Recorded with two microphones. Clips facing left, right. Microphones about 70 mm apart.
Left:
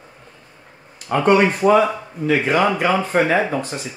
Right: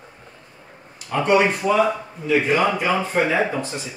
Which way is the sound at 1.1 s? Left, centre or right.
Left.